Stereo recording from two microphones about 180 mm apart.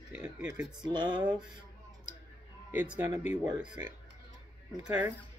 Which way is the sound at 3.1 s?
25° right (ahead or behind).